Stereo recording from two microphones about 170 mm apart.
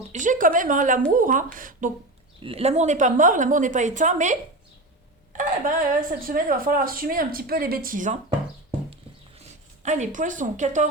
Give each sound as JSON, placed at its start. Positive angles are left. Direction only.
{"t": 0.1, "sound": "a woman's voice", "side_deg": -50}
{"t": 2.4, "sound": "a woman's voice", "side_deg": -35}
{"t": 9.4, "sound": "a woman's voice", "side_deg": -45}